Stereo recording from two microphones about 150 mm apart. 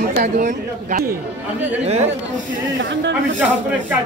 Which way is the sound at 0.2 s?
60° right (ahead or behind).